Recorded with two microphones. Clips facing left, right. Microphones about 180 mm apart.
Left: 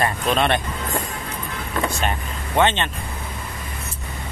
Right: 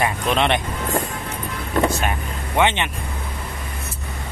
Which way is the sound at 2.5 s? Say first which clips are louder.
Even; 15° right (ahead or behind).